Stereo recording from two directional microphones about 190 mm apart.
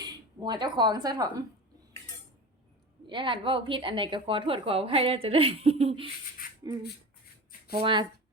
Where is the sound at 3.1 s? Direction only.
25° right (ahead or behind).